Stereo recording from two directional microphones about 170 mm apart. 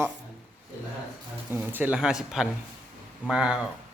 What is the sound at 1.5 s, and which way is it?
A man's voice, 10° right (ahead or behind).